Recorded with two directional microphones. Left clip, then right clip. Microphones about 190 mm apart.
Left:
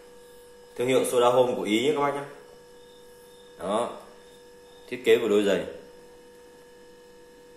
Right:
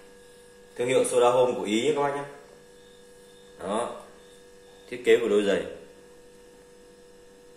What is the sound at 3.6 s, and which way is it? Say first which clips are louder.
Hum: left 2 dB; 25° left (ahead or behind).